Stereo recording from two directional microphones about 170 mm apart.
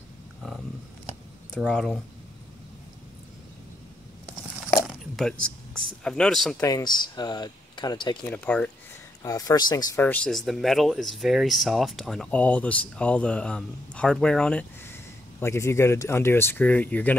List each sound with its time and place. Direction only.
1.6 s speech: 5° left (ahead or behind)
4.8 s a sound: centre (ahead or behind)
6.0 s speech: 5° left (ahead or behind)
6.6 s speech: 25° left (ahead or behind)
8.3 s speech: 10° left (ahead or behind)
9.2 s speech: 20° left (ahead or behind)
10.0 s speech: 5° left (ahead or behind)